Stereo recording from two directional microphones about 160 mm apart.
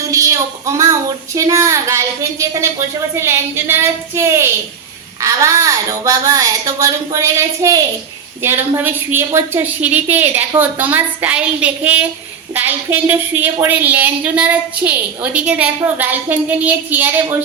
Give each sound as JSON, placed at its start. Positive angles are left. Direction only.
{"t": 0.0, "sound": "a woman's voice", "side_deg": -20}